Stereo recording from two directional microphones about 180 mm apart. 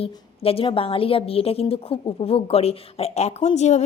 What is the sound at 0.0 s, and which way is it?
A woman's voice, 30° left (ahead or behind).